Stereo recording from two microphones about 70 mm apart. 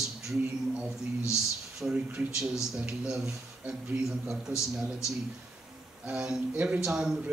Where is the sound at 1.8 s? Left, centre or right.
Centre.